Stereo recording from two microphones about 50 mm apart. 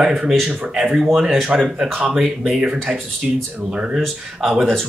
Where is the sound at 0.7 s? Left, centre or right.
Centre.